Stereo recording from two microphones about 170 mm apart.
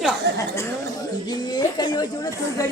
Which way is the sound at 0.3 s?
15° left (ahead or behind).